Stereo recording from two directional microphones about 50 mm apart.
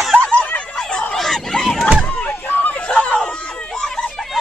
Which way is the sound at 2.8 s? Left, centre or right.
Left.